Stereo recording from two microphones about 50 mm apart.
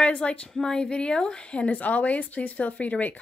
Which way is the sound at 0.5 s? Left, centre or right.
Centre.